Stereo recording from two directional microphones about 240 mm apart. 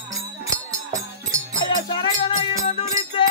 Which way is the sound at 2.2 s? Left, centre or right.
Left.